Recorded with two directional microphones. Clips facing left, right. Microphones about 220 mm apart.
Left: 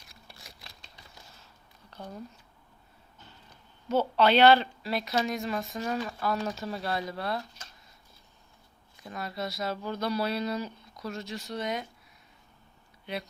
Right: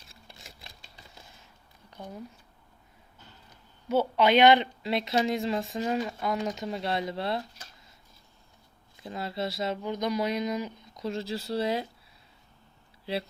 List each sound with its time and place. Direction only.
0.0 s a sound: 25° right (ahead or behind)
1.9 s speech: 10° right (ahead or behind)
3.8 s a woman's voice: 10° right (ahead or behind)
9.0 s a woman's voice: 25° right (ahead or behind)
13.1 s speech: 30° right (ahead or behind)